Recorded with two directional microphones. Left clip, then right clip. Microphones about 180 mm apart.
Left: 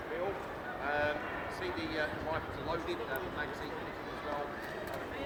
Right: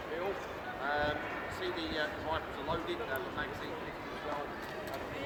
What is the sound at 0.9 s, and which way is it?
Speech, 30° left (ahead or behind).